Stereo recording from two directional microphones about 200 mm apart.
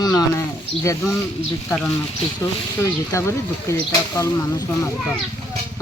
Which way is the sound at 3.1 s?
15° left (ahead or behind).